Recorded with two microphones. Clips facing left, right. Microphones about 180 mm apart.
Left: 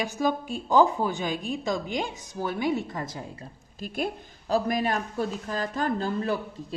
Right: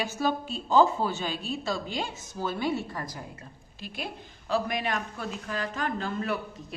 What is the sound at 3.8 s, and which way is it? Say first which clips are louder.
A woman's voice: left 7 dB; 50° left (ahead or behind).